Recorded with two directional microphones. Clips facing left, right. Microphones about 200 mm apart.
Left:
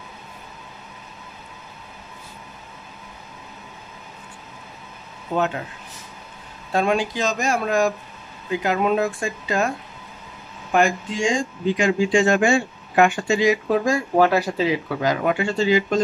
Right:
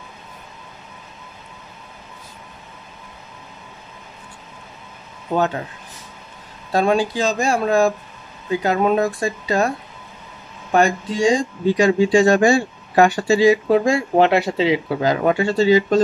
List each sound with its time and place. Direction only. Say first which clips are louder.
5.3 s speech: right 3 dB; 70° right (ahead or behind)
6.7 s speech: right 3 dB; 35° right (ahead or behind)
10.7 s speech: right 2 dB; 35° right (ahead or behind)